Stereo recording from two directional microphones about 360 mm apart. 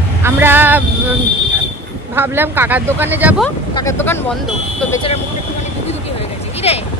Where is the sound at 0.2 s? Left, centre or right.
Centre.